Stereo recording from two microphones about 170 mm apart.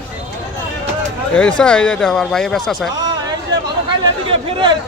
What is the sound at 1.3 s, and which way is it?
Speech, 5° left (ahead or behind).